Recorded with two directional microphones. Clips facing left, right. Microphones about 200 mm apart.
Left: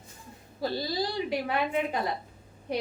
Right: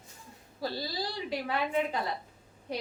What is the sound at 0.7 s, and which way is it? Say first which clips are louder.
Speech: left 8 dB; 20° left (ahead or behind).